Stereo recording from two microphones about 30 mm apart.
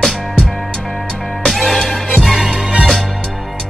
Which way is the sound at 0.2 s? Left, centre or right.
Centre.